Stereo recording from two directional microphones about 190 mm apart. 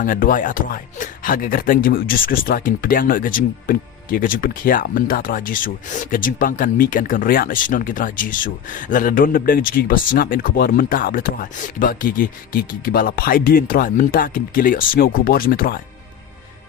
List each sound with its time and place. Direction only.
0.0 s speech: 45° left (ahead or behind)